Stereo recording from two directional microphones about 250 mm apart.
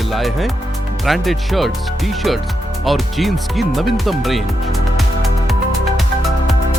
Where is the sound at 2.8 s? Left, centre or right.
Centre.